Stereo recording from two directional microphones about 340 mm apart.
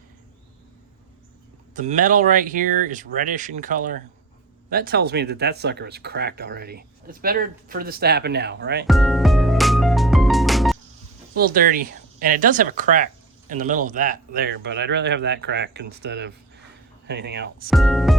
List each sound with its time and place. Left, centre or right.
1.7 s speech: right
8.9 s music: centre
11.3 s speech: right
17.7 s speech: centre